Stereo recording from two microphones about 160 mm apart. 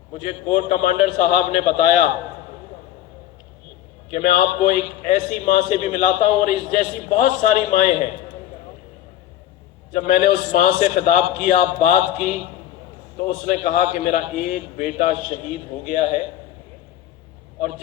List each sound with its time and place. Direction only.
0.1 s a man's voice: 50° left (ahead or behind)
4.1 s a man's voice: 50° left (ahead or behind)
9.9 s a man's voice: 45° left (ahead or behind)
13.4 s a man's voice: 50° left (ahead or behind)